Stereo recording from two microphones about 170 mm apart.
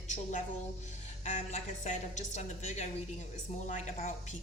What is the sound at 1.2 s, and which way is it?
A woman's voice, 45° left (ahead or behind).